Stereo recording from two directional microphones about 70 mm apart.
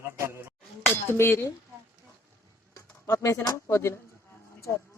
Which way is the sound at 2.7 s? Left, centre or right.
Left.